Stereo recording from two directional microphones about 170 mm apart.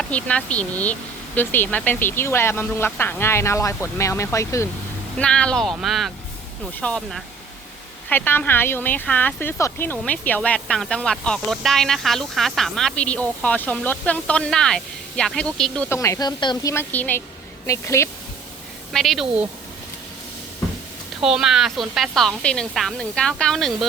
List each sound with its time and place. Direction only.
0.1 s speech: 5° left (ahead or behind)
5.1 s speech: 5° left (ahead or behind); by 16.7 s 25° left (ahead or behind)
16.7 s speech: 10° left (ahead or behind)
18.9 s speech: centre (ahead or behind)
21.2 s speech: 5° right (ahead or behind)